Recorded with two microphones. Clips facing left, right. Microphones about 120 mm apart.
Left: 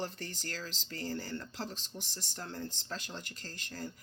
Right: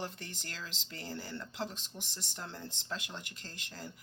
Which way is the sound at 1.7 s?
60° right (ahead or behind).